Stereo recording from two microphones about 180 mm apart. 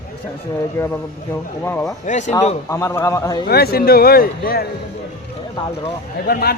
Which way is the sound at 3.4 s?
60° left (ahead or behind).